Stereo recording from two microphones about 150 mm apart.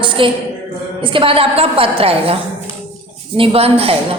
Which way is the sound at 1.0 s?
35° right (ahead or behind).